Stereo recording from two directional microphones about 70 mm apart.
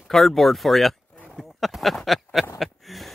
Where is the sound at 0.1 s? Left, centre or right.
Centre.